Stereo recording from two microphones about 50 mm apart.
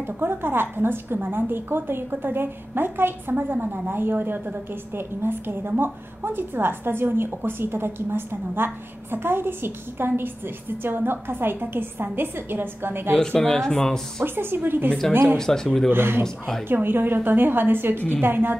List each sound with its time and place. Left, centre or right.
0.0 s a woman's voice: right
13.4 s speech: centre
14.2 s a woman's voice: right
15.3 s speech: centre
15.9 s a woman's voice: right